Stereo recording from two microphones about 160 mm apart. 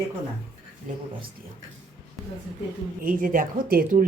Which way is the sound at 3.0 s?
60° right (ahead or behind).